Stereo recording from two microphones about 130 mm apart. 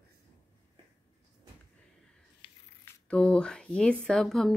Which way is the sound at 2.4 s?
40° left (ahead or behind).